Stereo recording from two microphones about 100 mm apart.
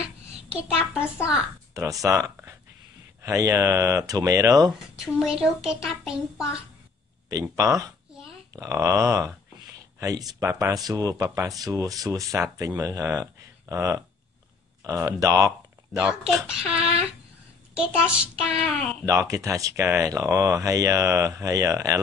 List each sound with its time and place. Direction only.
0.5 s a child's voice: 10° right (ahead or behind)
1.7 s speech: 35° right (ahead or behind)
4.9 s a child's voice: 5° right (ahead or behind)
7.5 s speech: 35° right (ahead or behind)
16.1 s a child's voice: 5° right (ahead or behind)
17.7 s a child's voice: 10° right (ahead or behind)
19.0 s speech: 30° right (ahead or behind)